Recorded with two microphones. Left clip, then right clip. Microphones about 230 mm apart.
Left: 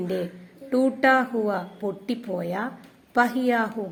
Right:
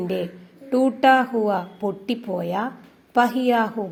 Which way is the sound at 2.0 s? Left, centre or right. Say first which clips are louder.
Right 3 dB; centre.